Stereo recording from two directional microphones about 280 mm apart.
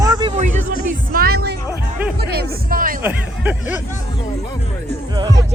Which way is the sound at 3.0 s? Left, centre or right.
Centre.